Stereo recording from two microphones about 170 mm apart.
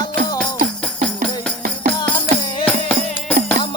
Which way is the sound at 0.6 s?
5° left (ahead or behind).